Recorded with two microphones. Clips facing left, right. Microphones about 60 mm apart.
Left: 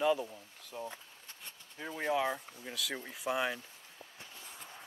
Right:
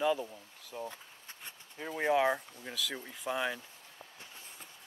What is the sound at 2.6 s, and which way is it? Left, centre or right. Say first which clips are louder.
Speech: right 1 dB; centre.